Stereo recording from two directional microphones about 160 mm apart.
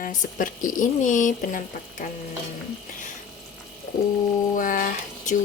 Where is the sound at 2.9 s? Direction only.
55° left (ahead or behind).